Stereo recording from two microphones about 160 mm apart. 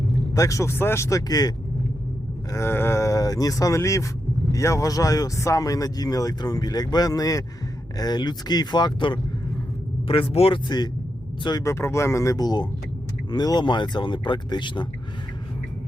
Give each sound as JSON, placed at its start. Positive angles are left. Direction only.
{"t": 0.3, "sound": "speech", "side_deg": 20}